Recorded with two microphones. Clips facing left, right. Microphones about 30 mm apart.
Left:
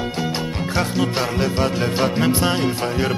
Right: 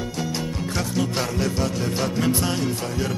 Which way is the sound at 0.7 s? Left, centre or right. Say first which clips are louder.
Left 4 dB; left.